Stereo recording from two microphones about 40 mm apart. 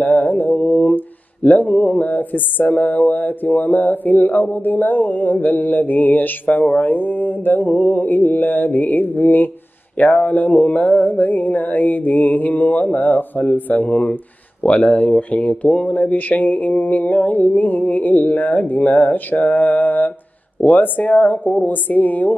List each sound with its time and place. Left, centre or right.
0.0 s mantra: left
0.6 s mantra: left
1.9 s speech: left
13.8 s speech: left